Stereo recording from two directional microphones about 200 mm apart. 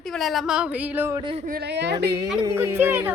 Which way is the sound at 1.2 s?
25° right (ahead or behind).